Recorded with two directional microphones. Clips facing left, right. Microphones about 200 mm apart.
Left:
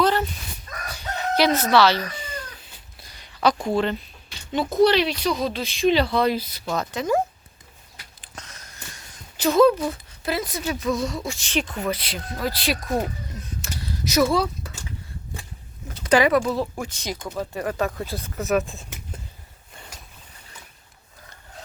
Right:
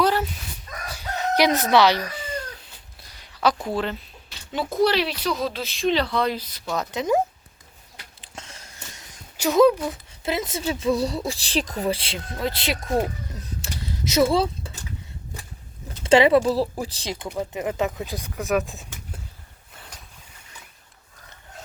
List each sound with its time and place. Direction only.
0.0 s chicken: 5° right (ahead or behind)
0.9 s crowing: 5° right (ahead or behind)
1.5 s speech: 15° right (ahead or behind)
3.0 s a sound: centre (ahead or behind)
4.8 s speech: 5° right (ahead or behind)
6.7 s speech: 20° right (ahead or behind)
8.4 s a sound: 30° right (ahead or behind)
9.4 s speech: 15° right (ahead or behind)
13.6 s a sound: 25° right (ahead or behind)
16.0 s speech: 25° right (ahead or behind)
17.2 s speech: 15° right (ahead or behind)
18.3 s speech: centre (ahead or behind)